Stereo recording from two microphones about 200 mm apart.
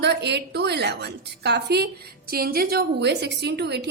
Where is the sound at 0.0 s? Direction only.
55° right (ahead or behind).